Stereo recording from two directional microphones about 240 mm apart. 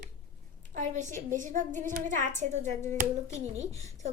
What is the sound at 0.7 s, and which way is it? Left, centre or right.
A woman's voice, right.